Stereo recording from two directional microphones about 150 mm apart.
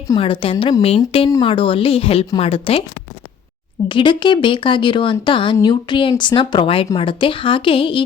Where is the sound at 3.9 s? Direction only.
35° left (ahead or behind).